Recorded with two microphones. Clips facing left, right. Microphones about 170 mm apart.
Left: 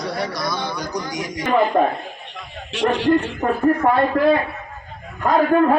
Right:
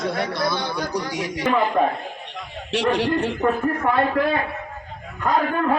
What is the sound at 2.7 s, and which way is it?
Speech, 65° right (ahead or behind).